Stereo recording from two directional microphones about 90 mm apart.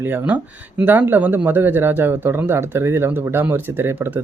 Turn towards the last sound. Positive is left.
turn(degrees=-25)  # may be behind; listen again after turning